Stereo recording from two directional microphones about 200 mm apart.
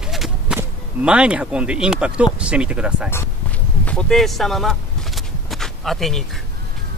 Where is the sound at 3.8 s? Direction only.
5° left (ahead or behind).